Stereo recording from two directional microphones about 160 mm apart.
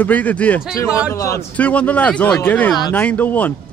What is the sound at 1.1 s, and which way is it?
Speech, 20° left (ahead or behind).